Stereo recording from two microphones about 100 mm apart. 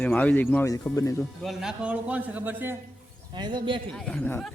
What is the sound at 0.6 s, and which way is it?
Speech, 30° left (ahead or behind).